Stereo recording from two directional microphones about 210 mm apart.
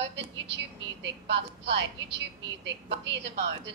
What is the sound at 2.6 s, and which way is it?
Speech, 55° right (ahead or behind).